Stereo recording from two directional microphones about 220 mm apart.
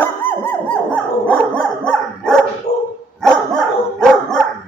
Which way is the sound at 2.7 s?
40° left (ahead or behind).